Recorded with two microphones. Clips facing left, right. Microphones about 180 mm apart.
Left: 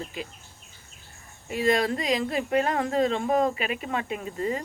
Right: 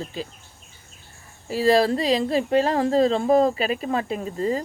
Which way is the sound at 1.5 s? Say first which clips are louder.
Right 5 dB; 35° right (ahead or behind).